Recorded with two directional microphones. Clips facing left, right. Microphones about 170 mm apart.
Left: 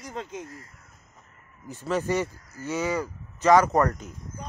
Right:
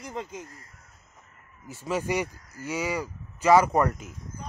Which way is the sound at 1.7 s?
10° right (ahead or behind).